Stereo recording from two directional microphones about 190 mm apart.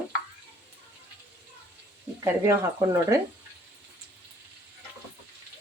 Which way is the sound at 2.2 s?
15° right (ahead or behind).